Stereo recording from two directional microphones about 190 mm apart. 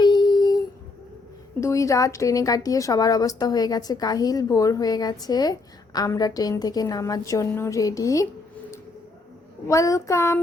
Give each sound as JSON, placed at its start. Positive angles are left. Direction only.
{"t": 0.0, "sound": "a sound", "side_deg": 25}
{"t": 1.6, "sound": "a woman's voice", "side_deg": 15}
{"t": 9.6, "sound": "child singing", "side_deg": 15}